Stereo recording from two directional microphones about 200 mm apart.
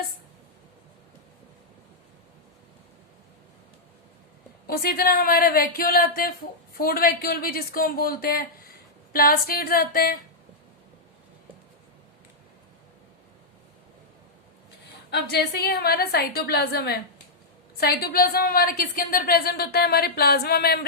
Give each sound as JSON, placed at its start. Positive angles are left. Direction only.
{"t": 4.6, "sound": "a woman's voice", "side_deg": 50}
{"t": 15.1, "sound": "a woman's voice", "side_deg": 55}